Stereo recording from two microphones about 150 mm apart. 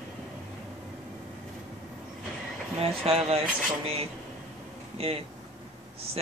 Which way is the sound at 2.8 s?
40° right (ahead or behind).